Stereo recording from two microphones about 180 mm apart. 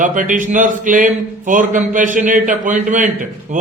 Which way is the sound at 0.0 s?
45° right (ahead or behind).